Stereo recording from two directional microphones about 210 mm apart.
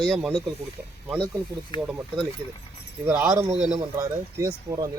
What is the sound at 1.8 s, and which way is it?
Speech, centre (ahead or behind).